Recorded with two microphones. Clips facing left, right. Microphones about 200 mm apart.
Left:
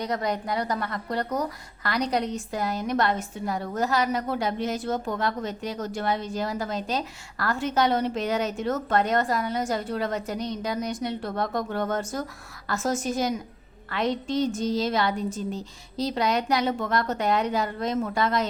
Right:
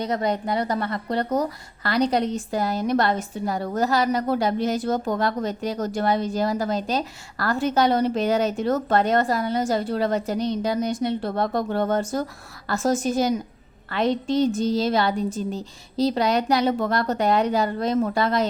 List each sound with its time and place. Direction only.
0.0 s a woman's voice: 25° right (ahead or behind)